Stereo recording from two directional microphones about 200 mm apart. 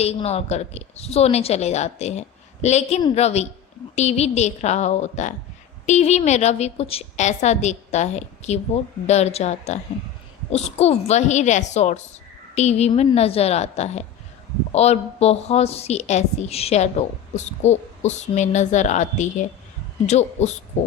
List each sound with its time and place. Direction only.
0.0 s a woman's voice: 30° left (ahead or behind)